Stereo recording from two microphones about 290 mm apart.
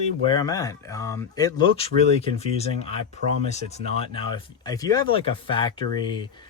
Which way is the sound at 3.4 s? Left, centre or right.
Left.